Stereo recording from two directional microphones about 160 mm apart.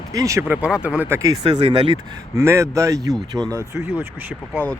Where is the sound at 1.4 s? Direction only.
40° right (ahead or behind).